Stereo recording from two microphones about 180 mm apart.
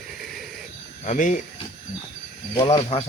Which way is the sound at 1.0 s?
45° left (ahead or behind).